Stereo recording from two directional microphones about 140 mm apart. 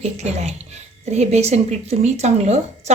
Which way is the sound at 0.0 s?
50° right (ahead or behind).